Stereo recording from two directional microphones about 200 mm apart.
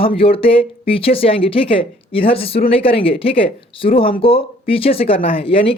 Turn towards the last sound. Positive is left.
turn(degrees=30)  # may be behind; listen again after turning